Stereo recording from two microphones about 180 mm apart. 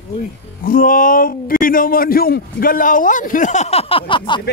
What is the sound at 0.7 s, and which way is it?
A man's voice, 50° left (ahead or behind).